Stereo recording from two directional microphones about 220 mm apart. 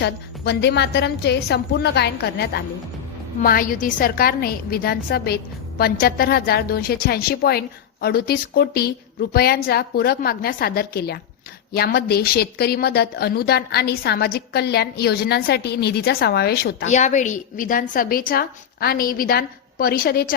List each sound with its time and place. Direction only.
0.0 s a woman's voice: 50° left (ahead or behind)
16.9 s a woman's voice: 35° left (ahead or behind)